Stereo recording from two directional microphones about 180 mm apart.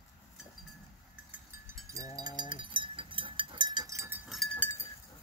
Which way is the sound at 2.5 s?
25° right (ahead or behind).